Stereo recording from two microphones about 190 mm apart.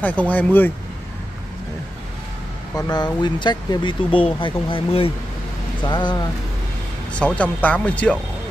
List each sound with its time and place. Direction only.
0.0 s speech: 10° left (ahead or behind)
2.7 s speech: 20° left (ahead or behind)
7.2 s speech: 5° left (ahead or behind)